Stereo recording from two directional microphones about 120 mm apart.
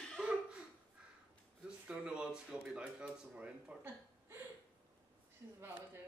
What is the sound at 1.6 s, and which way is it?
Speech, 10° right (ahead or behind).